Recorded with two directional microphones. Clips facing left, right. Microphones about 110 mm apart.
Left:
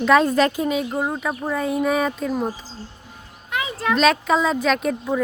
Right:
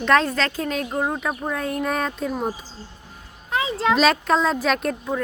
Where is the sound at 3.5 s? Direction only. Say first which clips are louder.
Right 2 dB; 25° right (ahead or behind).